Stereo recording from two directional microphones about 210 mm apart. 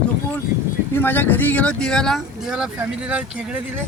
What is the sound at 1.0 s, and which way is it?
Speech, 10° left (ahead or behind).